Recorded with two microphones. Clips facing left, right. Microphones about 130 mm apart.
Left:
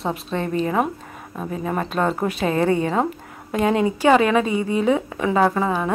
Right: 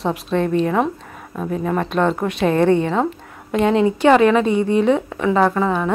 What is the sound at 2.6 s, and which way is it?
Speech, 30° right (ahead or behind).